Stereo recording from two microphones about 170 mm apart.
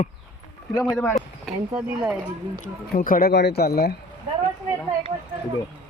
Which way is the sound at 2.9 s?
55° left (ahead or behind).